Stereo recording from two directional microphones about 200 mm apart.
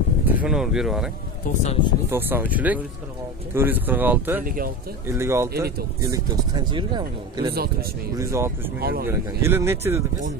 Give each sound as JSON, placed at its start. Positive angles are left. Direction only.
{"t": 0.2, "sound": "speech", "side_deg": -10}
{"t": 1.6, "sound": "speech", "side_deg": 25}
{"t": 2.0, "sound": "a man's voice", "side_deg": -10}
{"t": 8.7, "sound": "speech", "side_deg": -50}
{"t": 9.0, "sound": "speech", "side_deg": -10}